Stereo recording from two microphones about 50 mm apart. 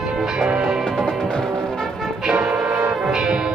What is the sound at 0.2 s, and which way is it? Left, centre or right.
Music, centre.